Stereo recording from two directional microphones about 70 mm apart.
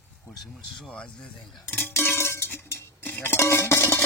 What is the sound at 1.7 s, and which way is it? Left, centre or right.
Cowbell, left.